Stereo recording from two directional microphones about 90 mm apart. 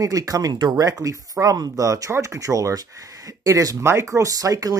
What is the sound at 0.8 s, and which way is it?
Speech, 40° right (ahead or behind).